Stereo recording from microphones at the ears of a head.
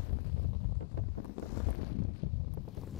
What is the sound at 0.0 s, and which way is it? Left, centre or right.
Wind noise, left.